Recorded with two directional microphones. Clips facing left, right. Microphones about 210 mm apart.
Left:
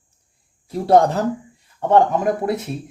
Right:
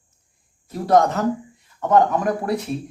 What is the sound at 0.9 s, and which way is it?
Speech, 30° left (ahead or behind).